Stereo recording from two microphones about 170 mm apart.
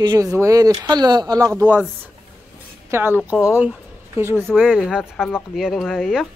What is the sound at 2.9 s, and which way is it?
Speech, 15° right (ahead or behind).